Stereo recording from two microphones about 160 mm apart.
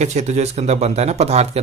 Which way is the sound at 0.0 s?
45° right (ahead or behind).